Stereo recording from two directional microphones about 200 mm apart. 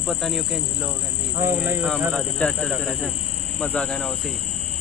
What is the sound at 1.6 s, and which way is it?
Speech, 10° right (ahead or behind).